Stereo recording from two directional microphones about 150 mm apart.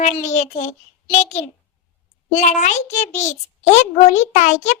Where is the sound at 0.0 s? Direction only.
50° left (ahead or behind).